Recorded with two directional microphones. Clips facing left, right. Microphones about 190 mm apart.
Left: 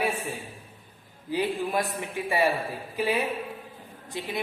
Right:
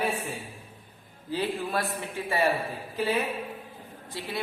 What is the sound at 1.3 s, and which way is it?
A woman's voice, 15° left (ahead or behind).